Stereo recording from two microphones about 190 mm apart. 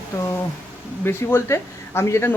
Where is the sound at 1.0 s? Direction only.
15° left (ahead or behind).